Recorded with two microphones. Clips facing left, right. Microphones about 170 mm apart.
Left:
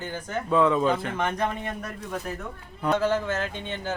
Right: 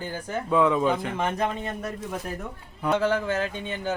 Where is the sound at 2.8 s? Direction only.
Centre (ahead or behind).